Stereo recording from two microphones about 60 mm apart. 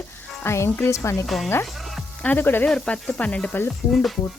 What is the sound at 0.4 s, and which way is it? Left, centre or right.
Speech, left.